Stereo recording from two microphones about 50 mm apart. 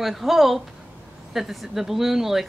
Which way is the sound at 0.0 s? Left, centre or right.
Centre.